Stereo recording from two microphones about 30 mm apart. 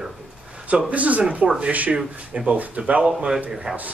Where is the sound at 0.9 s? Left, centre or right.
Right.